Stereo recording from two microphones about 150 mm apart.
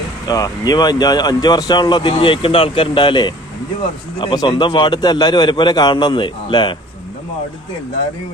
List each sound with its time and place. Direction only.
0.3 s a man's voice: 25° left (ahead or behind)